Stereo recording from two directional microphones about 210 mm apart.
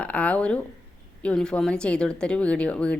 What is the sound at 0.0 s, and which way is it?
Speech, 5° left (ahead or behind).